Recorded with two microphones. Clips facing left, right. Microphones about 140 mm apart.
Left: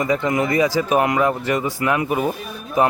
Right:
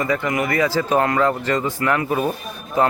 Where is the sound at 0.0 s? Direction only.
20° left (ahead or behind).